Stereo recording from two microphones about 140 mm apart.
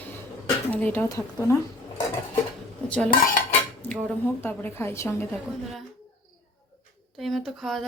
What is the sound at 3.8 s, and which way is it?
A woman's voice, 10° left (ahead or behind).